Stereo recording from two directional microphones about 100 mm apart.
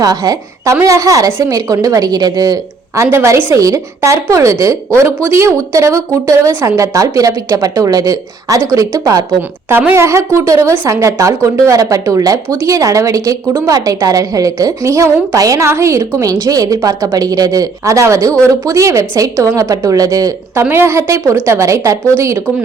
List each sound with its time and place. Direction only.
0.0 s a woman's voice: 40° right (ahead or behind)
9.6 s a woman's voice: 25° right (ahead or behind)
20.7 s a woman's voice: 25° right (ahead or behind)